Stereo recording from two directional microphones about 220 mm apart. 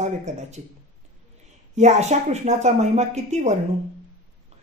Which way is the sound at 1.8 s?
30° right (ahead or behind).